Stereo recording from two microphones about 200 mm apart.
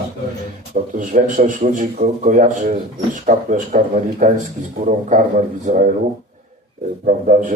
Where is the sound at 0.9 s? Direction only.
45° right (ahead or behind).